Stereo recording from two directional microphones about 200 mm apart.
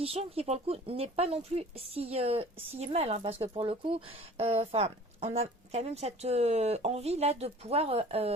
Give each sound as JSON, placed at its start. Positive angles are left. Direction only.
{"t": 0.0, "sound": "speech", "side_deg": -30}